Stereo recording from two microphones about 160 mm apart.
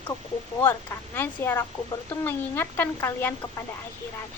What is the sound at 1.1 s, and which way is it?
A child's voice, 15° left (ahead or behind).